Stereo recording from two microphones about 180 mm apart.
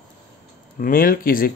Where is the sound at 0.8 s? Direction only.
50° left (ahead or behind).